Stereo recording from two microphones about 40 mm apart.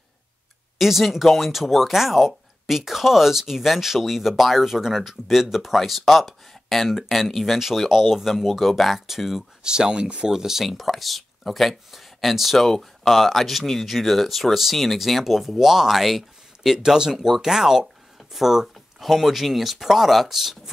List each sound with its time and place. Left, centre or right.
0.7 s speech: centre
9.6 s speech: centre
10.3 s speech: centre
10.7 s speech: centre